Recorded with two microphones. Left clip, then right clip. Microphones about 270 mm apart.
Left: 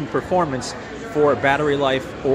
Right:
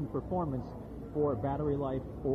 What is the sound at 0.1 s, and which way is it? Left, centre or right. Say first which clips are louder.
Speech: left 16 dB; left.